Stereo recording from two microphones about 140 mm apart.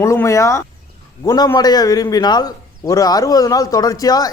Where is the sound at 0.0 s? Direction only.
20° left (ahead or behind).